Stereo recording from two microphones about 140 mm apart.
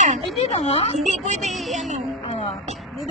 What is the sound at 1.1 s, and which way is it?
Speech, 55° right (ahead or behind).